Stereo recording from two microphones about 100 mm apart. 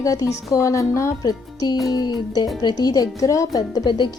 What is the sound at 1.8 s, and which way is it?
Music, 40° left (ahead or behind).